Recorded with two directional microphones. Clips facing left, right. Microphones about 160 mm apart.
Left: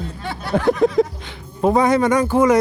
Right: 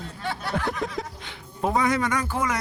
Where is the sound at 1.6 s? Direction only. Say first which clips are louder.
Left 8 dB; 25° left (ahead or behind).